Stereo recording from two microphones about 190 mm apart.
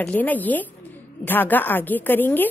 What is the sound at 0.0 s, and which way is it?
A woman's voice, 10° left (ahead or behind).